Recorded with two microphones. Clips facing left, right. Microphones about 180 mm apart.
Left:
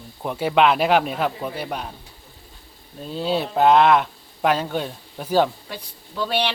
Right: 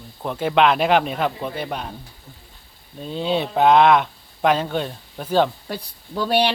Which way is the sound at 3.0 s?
5° left (ahead or behind).